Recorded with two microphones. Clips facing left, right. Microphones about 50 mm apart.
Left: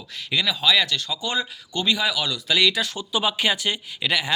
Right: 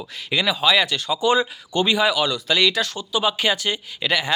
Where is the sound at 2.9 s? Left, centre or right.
Centre.